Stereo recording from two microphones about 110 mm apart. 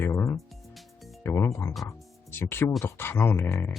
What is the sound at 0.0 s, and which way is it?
Music, 25° left (ahead or behind).